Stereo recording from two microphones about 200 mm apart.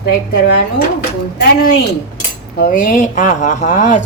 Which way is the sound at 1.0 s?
50° left (ahead or behind).